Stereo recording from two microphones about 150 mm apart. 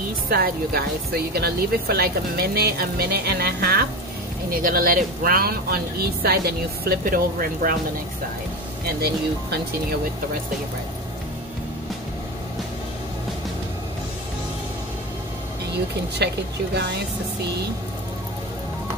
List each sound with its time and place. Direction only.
0.3 s speech: 90° right
4.5 s speech: 70° right (ahead or behind)
8.8 s speech: 90° right
16.2 s speech: 90° right